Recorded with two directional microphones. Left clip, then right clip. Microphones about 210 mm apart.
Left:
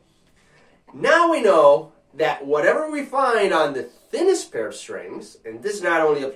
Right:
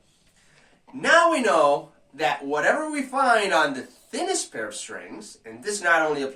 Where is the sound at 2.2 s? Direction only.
Centre (ahead or behind).